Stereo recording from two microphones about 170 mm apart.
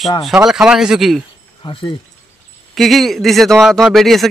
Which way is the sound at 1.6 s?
30° left (ahead or behind).